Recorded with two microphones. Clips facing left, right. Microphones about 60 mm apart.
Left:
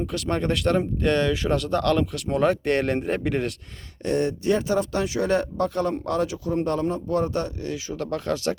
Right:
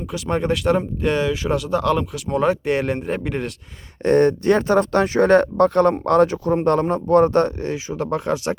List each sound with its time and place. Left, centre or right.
0.1 s speech: centre
4.0 s speech: right
7.9 s speech: right